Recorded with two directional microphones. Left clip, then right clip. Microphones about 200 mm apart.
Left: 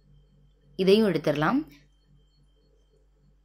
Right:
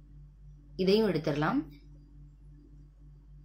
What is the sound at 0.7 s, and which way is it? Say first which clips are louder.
Speech: left 5 dB; 35° left (ahead or behind).